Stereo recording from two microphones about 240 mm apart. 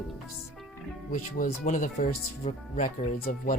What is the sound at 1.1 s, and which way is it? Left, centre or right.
Speech, left.